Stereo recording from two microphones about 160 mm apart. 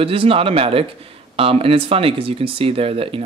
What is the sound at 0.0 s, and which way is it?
Speech, 35° right (ahead or behind).